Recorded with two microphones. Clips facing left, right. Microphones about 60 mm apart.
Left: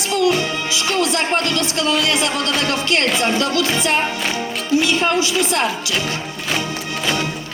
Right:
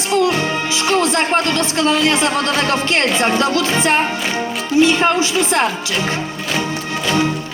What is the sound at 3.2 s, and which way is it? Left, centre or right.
A woman's voice, right.